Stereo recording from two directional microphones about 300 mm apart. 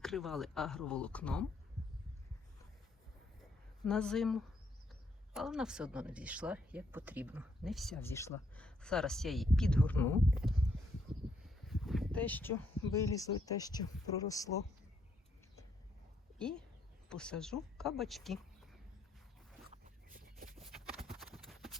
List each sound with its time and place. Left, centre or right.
0.0 s speech: centre
3.8 s speech: centre
16.4 s speech: centre
19.6 s a sound: right
20.7 s clip-clop: centre